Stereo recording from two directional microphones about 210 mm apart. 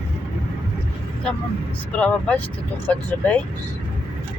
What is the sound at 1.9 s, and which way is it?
Speech, 5° left (ahead or behind).